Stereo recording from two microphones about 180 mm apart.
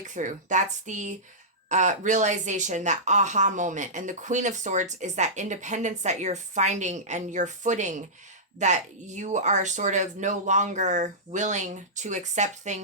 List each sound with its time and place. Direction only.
0.1 s speech: 45° right (ahead or behind)